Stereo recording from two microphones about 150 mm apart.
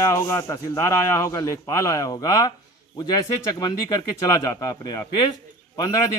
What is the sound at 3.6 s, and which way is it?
Speech, 25° left (ahead or behind).